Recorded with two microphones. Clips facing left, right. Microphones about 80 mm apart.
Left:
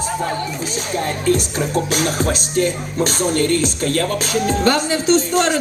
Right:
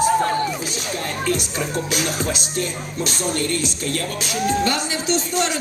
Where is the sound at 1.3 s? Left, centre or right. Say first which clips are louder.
Left 6 dB; left.